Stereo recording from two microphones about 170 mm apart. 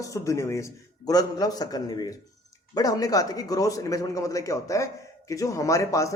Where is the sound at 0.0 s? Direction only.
20° left (ahead or behind).